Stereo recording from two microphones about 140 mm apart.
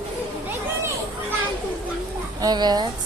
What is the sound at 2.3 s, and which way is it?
Speech, 30° right (ahead or behind).